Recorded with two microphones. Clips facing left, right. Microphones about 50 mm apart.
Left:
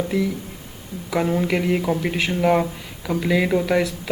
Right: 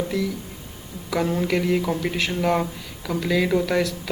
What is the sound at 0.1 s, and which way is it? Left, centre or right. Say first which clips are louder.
Speech: left 3 dB; centre.